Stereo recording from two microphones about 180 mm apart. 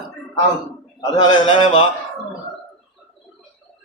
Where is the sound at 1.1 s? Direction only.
25° left (ahead or behind).